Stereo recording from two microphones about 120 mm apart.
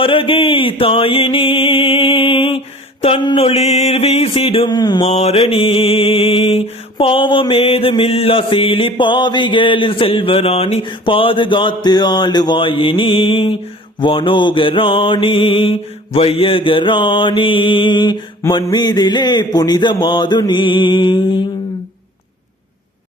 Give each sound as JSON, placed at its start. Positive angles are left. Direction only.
{"t": 0.0, "sound": "mantra", "side_deg": 50}
{"t": 3.2, "sound": "mantra", "side_deg": 40}
{"t": 3.4, "sound": "a sound", "side_deg": 60}
{"t": 4.7, "sound": "mantra", "side_deg": 35}
{"t": 5.0, "sound": "mantra", "side_deg": 60}